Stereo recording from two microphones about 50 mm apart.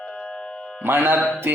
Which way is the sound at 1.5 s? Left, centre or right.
Right.